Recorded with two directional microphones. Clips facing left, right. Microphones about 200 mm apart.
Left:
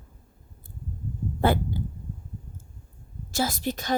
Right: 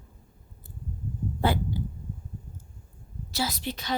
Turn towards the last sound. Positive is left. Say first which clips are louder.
# left 4 dB
turn(degrees=45)  # may be behind; listen again after turning